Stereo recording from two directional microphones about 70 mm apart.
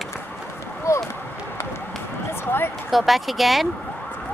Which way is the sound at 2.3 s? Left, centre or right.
Left.